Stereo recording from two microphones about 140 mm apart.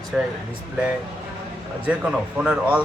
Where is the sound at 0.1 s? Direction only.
Centre (ahead or behind).